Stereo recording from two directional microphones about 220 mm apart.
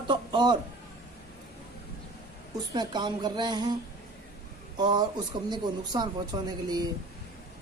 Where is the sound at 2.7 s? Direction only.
20° right (ahead or behind).